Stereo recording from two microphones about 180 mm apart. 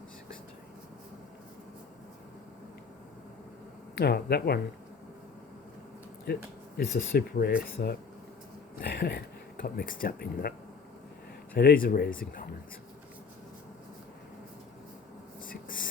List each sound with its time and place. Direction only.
3.9 s speech: 60° left (ahead or behind)
6.3 s speech: 65° left (ahead or behind)
11.5 s speech: 55° left (ahead or behind)
15.4 s writing: 50° left (ahead or behind)